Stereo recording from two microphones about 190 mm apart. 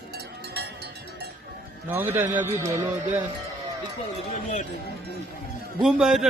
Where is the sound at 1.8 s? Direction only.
10° right (ahead or behind).